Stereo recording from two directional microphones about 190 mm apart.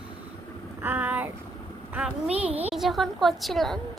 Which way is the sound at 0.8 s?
10° right (ahead or behind).